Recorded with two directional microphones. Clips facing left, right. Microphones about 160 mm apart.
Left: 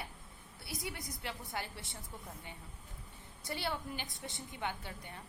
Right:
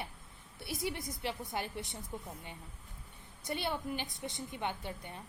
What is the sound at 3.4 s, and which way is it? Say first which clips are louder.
A woman's voice: right 3 dB; 20° right (ahead or behind).